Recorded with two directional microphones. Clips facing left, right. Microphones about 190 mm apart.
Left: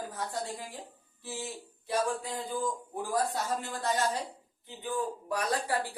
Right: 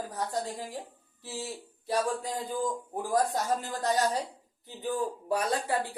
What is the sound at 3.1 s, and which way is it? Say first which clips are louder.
Speech: right 3 dB; 40° right (ahead or behind).